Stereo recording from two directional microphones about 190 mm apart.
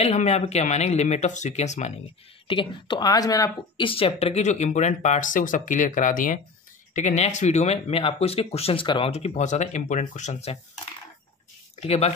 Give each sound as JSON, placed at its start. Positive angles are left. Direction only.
{"t": 0.0, "sound": "speech", "side_deg": 35}
{"t": 11.8, "sound": "speech", "side_deg": 35}